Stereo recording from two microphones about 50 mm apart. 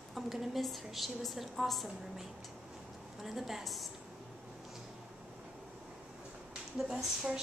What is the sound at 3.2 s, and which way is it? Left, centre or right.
Speech, centre.